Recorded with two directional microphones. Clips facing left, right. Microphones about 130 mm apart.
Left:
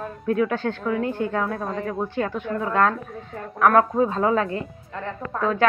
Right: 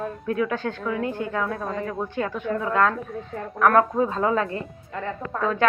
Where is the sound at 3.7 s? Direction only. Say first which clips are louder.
Left 1 dB; 25° left (ahead or behind).